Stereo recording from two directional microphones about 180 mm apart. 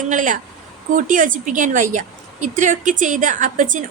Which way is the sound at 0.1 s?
45° right (ahead or behind).